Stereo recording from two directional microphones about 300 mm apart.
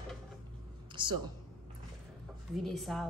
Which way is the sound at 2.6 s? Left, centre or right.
Centre.